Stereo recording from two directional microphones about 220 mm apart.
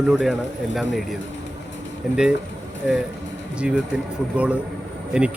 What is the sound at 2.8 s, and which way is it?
A man's voice, 5° right (ahead or behind).